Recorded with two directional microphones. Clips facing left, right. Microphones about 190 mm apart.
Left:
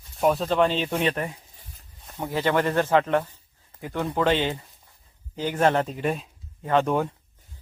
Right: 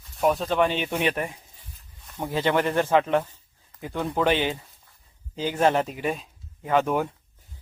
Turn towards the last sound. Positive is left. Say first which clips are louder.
# left 1 dB
turn(degrees=-5)  # may be behind; listen again after turning